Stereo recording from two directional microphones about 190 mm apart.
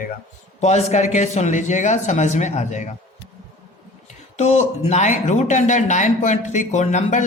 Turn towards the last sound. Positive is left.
turn(degrees=40)  # may be behind; listen again after turning